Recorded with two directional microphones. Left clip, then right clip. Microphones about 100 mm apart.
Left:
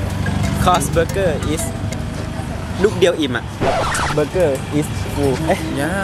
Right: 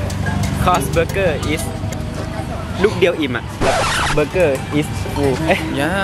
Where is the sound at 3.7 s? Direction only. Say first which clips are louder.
Right 2 dB; 25° left (ahead or behind).